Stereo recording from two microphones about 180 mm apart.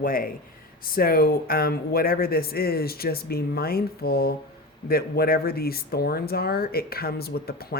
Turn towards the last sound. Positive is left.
turn(degrees=60)  # may be behind; listen again after turning